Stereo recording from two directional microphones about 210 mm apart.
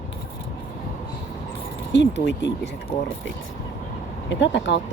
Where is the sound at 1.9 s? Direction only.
55° left (ahead or behind).